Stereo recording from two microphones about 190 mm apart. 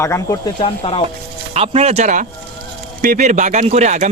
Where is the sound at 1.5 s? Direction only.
35° right (ahead or behind).